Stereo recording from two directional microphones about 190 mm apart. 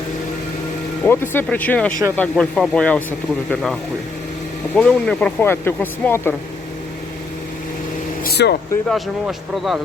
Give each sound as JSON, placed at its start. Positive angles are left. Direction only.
{"t": 1.0, "sound": "speech", "side_deg": 10}
{"t": 8.2, "sound": "vehicle", "side_deg": 60}
{"t": 8.9, "sound": "speech", "side_deg": 0}